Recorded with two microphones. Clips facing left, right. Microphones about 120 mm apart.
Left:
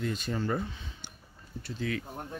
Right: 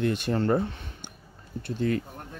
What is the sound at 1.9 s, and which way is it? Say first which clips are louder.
Speech: right 7 dB; 40° right (ahead or behind).